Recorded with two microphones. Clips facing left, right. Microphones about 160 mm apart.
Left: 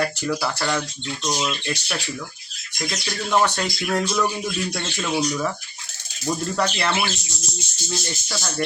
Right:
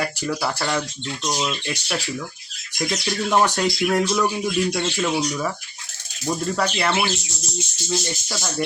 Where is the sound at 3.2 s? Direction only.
15° right (ahead or behind).